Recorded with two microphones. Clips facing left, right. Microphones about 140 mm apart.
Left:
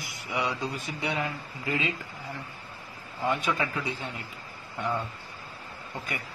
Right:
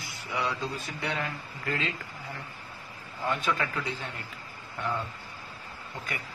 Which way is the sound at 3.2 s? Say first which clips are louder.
Left 2 dB; 15° left (ahead or behind).